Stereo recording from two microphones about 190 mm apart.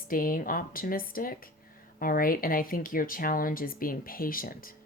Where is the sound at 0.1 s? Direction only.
50° left (ahead or behind).